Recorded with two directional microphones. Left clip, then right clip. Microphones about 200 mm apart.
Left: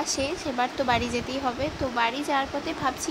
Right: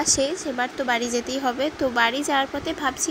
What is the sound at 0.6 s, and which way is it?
Speech, 5° right (ahead or behind).